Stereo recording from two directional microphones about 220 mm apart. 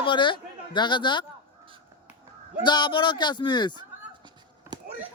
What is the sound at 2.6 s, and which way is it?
Speech, 20° left (ahead or behind).